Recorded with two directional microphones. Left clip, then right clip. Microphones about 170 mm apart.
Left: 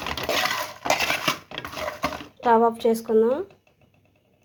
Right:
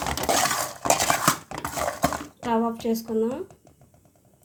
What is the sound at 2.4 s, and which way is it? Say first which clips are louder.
Speech: left 7 dB; 30° left (ahead or behind).